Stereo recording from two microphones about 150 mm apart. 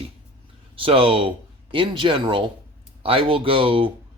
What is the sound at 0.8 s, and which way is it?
Speech, 35° right (ahead or behind).